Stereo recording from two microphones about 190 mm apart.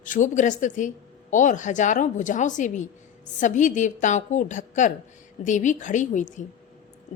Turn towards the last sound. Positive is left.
turn(degrees=40)  # may be behind; listen again after turning